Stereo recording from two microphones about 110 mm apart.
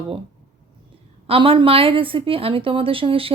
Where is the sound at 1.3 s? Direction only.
55° right (ahead or behind).